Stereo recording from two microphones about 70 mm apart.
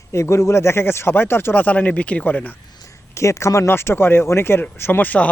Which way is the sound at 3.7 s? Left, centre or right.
Left.